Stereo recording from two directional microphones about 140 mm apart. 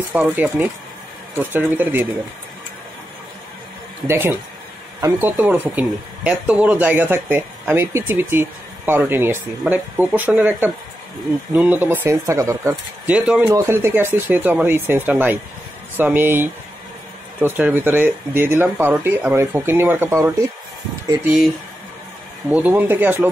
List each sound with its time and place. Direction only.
0.1 s speech: 10° right (ahead or behind)
4.1 s speech: 15° right (ahead or behind)
13.0 s speech: 10° right (ahead or behind)
22.5 s speech: 10° right (ahead or behind)